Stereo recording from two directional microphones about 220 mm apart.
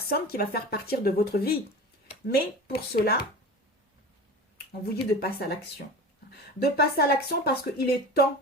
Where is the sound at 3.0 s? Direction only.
45° left (ahead or behind).